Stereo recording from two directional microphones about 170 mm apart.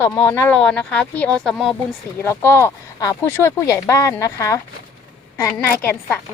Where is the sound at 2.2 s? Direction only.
15° left (ahead or behind).